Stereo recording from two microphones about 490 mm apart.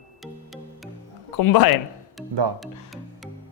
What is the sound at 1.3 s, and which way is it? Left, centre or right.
Speech, left.